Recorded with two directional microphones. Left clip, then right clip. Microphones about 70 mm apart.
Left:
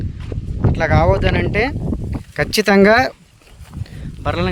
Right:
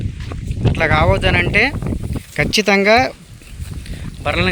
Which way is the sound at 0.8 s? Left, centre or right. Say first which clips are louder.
Right 1 dB; left.